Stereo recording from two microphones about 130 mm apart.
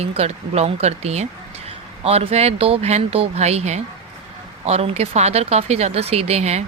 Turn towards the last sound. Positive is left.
turn(degrees=-55)  # may be behind; listen again after turning